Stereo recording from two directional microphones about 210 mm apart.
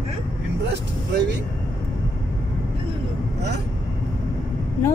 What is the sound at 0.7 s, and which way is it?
Speech, 55° right (ahead or behind).